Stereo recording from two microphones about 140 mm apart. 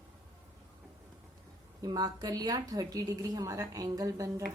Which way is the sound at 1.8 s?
25° right (ahead or behind).